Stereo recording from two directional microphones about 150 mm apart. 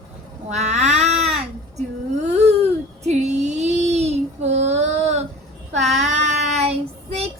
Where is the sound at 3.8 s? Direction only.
45° right (ahead or behind).